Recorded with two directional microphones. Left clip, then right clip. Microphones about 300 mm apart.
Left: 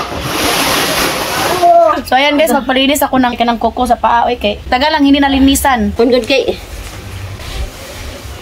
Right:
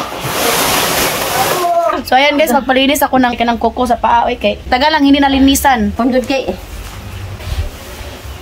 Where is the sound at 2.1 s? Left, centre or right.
Centre.